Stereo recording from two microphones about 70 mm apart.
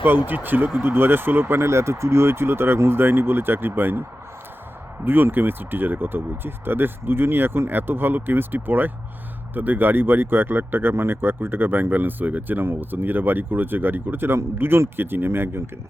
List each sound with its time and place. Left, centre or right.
0.3 s speech: right
5.0 s speech: right